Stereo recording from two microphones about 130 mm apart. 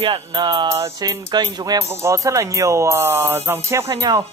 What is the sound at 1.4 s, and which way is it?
Speech, 30° right (ahead or behind).